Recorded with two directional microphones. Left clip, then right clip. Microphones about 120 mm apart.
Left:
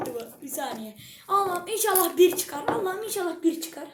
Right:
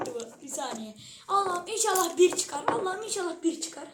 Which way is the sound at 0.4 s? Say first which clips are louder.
Left 3 dB; 10° left (ahead or behind).